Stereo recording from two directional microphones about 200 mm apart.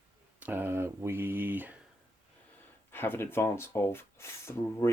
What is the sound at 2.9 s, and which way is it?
Speech, 10° left (ahead or behind).